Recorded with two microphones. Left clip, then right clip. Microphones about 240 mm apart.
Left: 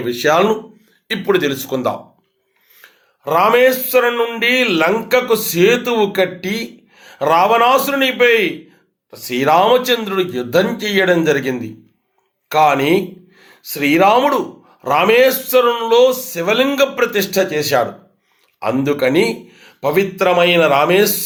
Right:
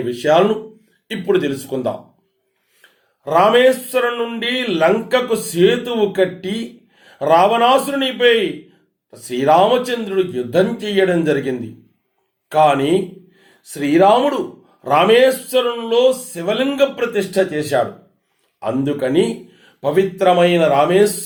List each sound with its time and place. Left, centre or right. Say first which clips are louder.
1.1 s a man's voice: left 2 dB; centre
3.2 s a man's voice: even; centre